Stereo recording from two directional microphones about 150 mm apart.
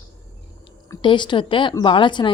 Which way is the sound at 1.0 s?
30° left (ahead or behind).